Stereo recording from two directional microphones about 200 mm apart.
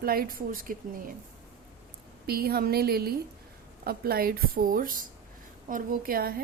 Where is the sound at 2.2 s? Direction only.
50° right (ahead or behind).